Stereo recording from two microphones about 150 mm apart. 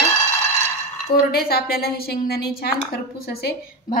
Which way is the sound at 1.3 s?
90° left.